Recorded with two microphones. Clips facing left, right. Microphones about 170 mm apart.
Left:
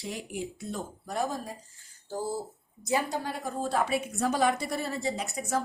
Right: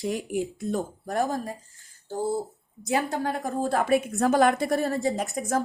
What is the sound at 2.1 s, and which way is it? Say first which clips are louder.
Speech: right 5 dB; 20° right (ahead or behind).